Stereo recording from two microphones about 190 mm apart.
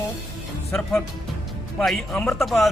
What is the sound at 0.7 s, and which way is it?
Speech, 5° left (ahead or behind).